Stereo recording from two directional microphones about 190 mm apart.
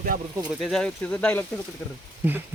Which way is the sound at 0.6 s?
Centre (ahead or behind).